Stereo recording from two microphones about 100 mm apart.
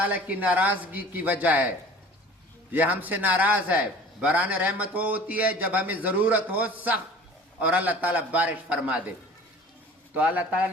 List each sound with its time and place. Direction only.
0.0 s a man's voice: 15° right (ahead or behind)
2.7 s a man's voice: 15° right (ahead or behind)
10.2 s a man's voice: 15° right (ahead or behind)